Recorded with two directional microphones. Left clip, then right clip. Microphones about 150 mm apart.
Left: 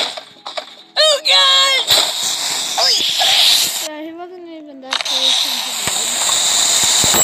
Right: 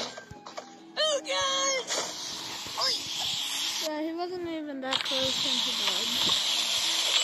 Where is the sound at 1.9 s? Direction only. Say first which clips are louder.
Left 18 dB; 55° left (ahead or behind).